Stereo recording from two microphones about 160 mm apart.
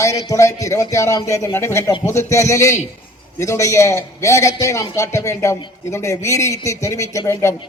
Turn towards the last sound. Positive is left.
turn(degrees=15)  # may be behind; listen again after turning